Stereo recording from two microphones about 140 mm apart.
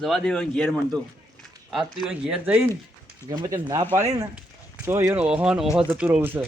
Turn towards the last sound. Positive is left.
turn(degrees=-15)  # may be behind; listen again after turning